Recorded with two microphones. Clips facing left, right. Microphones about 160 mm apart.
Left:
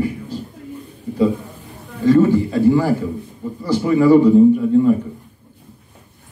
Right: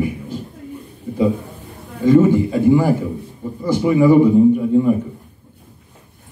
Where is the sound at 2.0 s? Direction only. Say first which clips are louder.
Right 1 dB; 15° right (ahead or behind).